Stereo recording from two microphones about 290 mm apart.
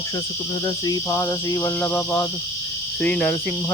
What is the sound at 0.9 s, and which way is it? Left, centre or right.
Cricket, centre.